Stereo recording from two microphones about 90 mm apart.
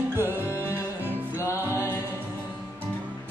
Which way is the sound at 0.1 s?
25° right (ahead or behind).